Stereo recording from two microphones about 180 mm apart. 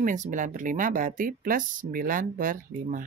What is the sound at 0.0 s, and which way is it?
Speech, 45° right (ahead or behind).